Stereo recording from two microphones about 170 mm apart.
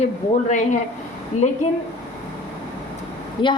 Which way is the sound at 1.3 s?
45° left (ahead or behind).